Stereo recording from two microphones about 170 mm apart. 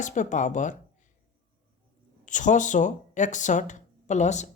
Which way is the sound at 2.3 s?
45° left (ahead or behind).